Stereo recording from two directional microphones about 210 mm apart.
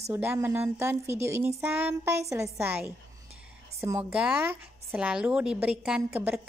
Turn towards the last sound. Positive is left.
turn(degrees=-10)  # may be behind; listen again after turning